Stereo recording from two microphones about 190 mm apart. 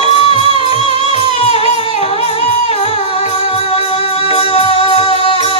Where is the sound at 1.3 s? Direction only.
30° left (ahead or behind).